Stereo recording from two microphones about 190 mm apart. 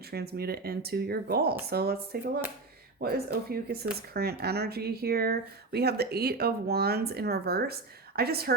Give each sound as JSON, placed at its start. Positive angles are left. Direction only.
{"t": 0.1, "sound": "speech", "side_deg": -55}